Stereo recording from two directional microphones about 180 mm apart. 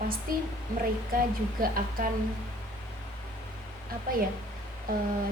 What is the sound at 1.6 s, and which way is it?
Speech, 50° right (ahead or behind).